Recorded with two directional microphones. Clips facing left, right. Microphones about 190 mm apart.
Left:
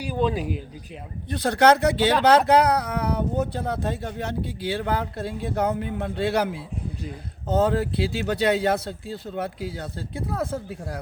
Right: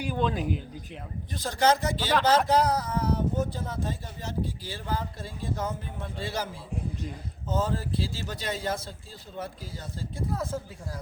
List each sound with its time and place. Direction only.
0.1 s speech: 10° left (ahead or behind)
1.3 s speech: 65° left (ahead or behind)